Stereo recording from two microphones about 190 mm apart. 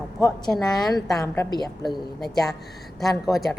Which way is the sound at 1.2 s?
20° left (ahead or behind).